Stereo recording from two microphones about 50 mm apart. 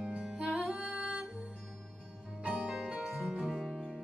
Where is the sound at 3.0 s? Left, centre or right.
Centre.